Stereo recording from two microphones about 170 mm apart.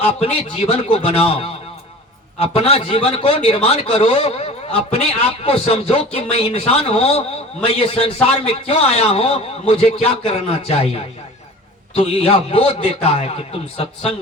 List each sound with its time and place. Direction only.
0.0 s a man's voice: 35° left (ahead or behind)